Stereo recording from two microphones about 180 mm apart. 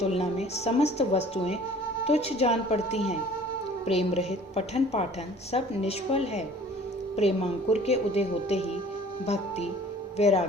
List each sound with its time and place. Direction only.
0.0 s a woman's voice: 35° left (ahead or behind)